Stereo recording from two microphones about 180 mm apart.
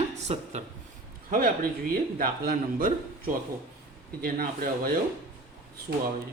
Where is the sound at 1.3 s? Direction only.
55° right (ahead or behind).